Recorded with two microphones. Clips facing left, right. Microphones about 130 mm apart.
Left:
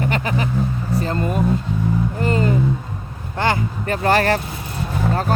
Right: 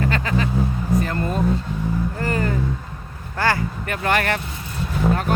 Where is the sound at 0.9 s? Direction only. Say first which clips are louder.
Even; 30° left (ahead or behind).